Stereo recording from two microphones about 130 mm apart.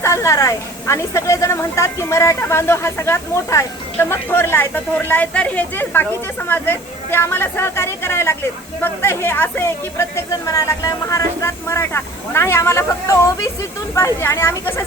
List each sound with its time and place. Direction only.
0.0 s a woman's voice: 20° left (ahead or behind)